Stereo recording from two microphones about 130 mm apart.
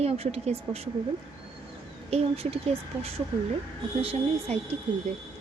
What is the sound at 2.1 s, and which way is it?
Speech, 50° right (ahead or behind).